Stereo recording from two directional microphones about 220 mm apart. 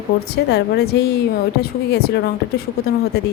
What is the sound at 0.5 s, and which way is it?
A woman's voice, 45° left (ahead or behind).